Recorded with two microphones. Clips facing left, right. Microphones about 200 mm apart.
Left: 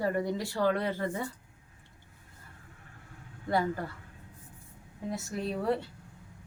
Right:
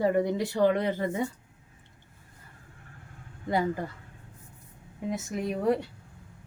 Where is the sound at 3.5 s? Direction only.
20° right (ahead or behind).